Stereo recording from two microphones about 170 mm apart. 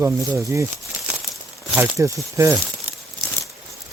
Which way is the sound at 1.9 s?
15° right (ahead or behind).